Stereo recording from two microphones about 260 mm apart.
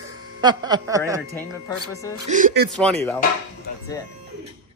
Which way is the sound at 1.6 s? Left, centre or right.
Centre.